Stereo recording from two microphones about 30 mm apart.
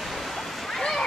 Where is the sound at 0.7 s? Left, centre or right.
Centre.